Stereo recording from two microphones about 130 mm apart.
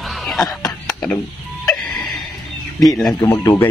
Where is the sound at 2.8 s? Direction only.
Centre (ahead or behind).